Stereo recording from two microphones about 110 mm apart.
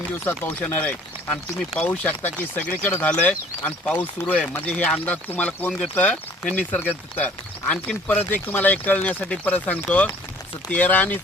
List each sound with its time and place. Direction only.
0.6 s speech: 10° left (ahead or behind)